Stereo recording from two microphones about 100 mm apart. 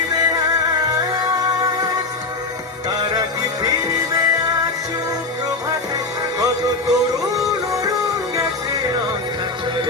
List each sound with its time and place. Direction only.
0.1 s music: 40° right (ahead or behind)
2.9 s music: 40° right (ahead or behind)
6.4 s music: 35° right (ahead or behind)